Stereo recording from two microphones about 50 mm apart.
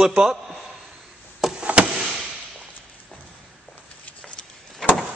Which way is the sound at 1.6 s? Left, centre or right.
Right.